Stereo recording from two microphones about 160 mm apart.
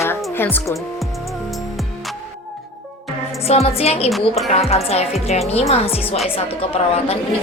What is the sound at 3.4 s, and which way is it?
A woman's voice, 40° left (ahead or behind).